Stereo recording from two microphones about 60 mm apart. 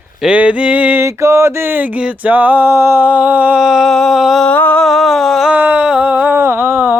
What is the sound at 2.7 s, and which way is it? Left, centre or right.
Mantra, right.